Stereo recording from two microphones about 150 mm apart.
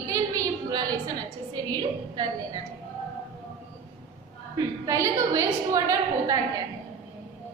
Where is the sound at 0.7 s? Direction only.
25° right (ahead or behind).